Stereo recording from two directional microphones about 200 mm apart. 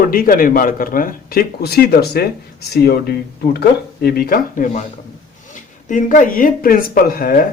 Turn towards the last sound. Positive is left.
turn(degrees=45)  # may be behind; listen again after turning